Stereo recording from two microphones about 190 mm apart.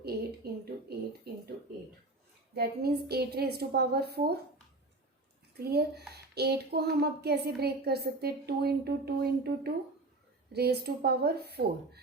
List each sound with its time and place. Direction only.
0.0 s a sound: 55° right (ahead or behind)
2.6 s speech: 55° right (ahead or behind)
5.6 s speech: 55° right (ahead or behind)